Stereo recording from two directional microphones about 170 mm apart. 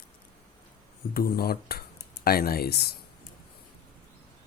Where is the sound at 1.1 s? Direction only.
65° left (ahead or behind).